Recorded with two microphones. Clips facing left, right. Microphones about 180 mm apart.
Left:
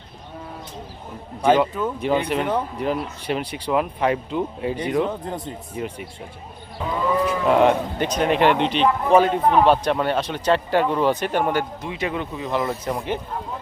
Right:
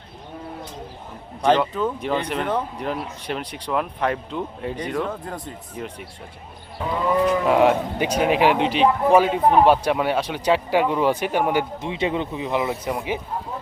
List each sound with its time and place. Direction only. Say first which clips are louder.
1.4 s speech: left 1 dB; 5° left (ahead or behind)
7.3 s speech: even; 5° right (ahead or behind)
11.8 s speech: right 3 dB; 25° right (ahead or behind); by 13.1 s 10° right (ahead or behind)